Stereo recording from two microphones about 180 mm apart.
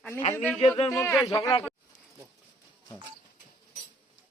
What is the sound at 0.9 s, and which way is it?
Speech, 15° left (ahead or behind).